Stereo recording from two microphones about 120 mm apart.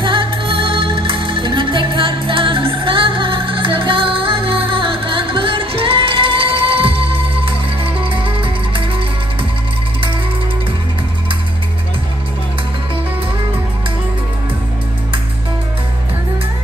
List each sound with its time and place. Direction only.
0.0 s music: 45° right (ahead or behind)